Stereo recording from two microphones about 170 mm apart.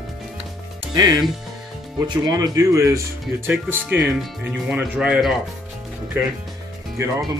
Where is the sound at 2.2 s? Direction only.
20° right (ahead or behind).